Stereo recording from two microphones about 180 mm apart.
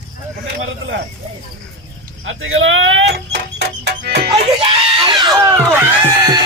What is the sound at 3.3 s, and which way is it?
Music, 75° right (ahead or behind).